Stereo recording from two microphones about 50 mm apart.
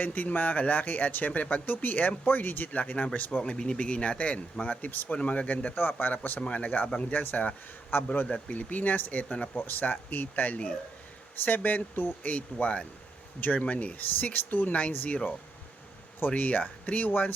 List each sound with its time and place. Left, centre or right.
0.0 s speech: left
5.1 s speech: left
6.0 s speech: left
9.6 s speech: left
12.3 s speech: left